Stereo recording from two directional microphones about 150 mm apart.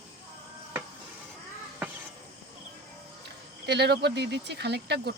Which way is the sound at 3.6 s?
90° right.